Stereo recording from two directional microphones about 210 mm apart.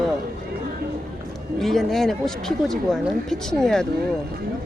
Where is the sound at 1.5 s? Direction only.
Centre (ahead or behind).